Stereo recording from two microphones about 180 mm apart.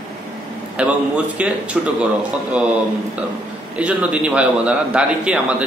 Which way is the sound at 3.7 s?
5° right (ahead or behind).